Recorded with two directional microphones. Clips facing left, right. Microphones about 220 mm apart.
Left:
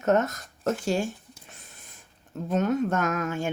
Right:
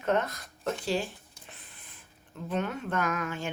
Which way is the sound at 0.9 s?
50° left (ahead or behind).